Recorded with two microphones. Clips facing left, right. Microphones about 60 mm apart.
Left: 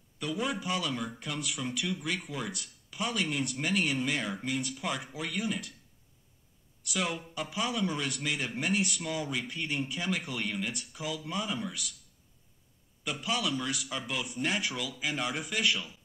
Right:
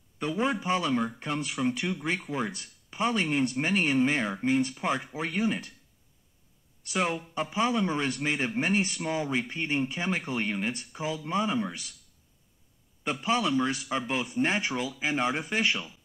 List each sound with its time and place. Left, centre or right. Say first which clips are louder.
0.2 s speech: right 5 dB; right
6.8 s speech: right 4 dB; right
13.0 s speech: right 5 dB; right